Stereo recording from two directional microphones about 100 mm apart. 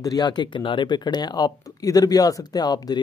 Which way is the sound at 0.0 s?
40° left (ahead or behind).